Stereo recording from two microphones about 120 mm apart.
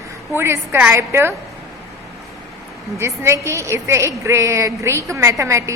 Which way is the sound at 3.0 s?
20° right (ahead or behind).